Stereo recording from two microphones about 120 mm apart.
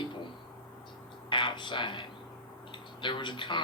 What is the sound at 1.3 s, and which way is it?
Speech, 40° left (ahead or behind).